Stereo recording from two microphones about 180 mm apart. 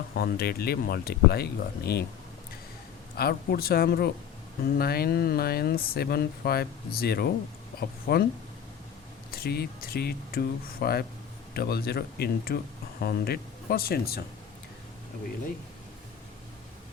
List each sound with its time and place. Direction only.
0.1 s speech: 60° left (ahead or behind)
3.2 s speech: 60° left (ahead or behind)
9.3 s speech: 60° left (ahead or behind)